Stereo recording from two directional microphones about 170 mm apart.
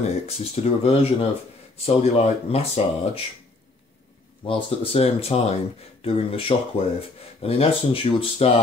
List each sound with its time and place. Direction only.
0.7 s speech: 35° left (ahead or behind)
4.5 s speech: 35° left (ahead or behind)